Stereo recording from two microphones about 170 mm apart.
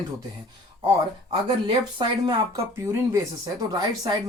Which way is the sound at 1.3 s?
30° right (ahead or behind).